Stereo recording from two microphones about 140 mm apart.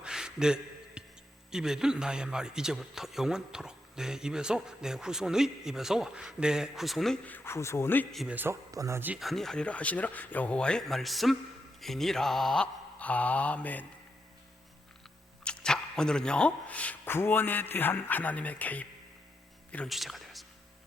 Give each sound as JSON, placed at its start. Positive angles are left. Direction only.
{"t": 0.0, "sound": "a sound", "side_deg": -5}
{"t": 1.5, "sound": "a man's voice", "side_deg": -5}
{"t": 7.3, "sound": "speech", "side_deg": 15}
{"t": 8.1, "sound": "a man's voice", "side_deg": 0}
{"t": 8.4, "sound": "speech", "side_deg": -20}
{"t": 9.1, "sound": "speech", "side_deg": 0}
{"t": 15.4, "sound": "speech", "side_deg": 5}